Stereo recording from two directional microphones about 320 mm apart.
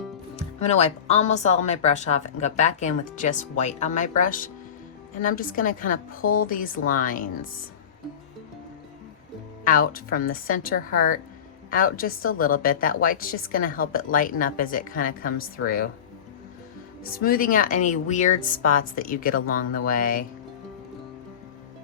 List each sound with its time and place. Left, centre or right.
0.3 s speech: left
9.6 s speech: left
17.1 s speech: left